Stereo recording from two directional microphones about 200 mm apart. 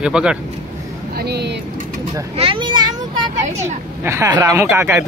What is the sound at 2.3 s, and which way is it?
Speech, 25° right (ahead or behind).